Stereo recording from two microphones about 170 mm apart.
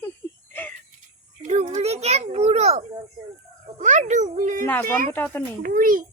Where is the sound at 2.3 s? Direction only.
40° right (ahead or behind).